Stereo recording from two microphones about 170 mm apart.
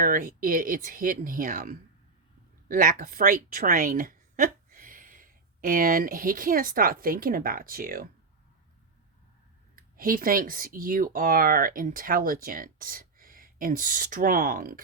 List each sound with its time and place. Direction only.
0.0 s a woman's voice: 55° right (ahead or behind)
9.7 s speech: 55° right (ahead or behind)